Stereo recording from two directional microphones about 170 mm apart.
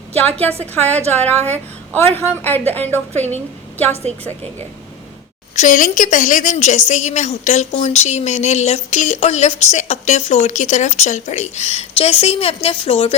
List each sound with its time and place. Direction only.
0.6 s a woman's voice: 10° left (ahead or behind)
3.1 s a woman's voice: 40° right (ahead or behind)
5.5 s a woman's voice: 50° left (ahead or behind); by 13.1 s 30° left (ahead or behind)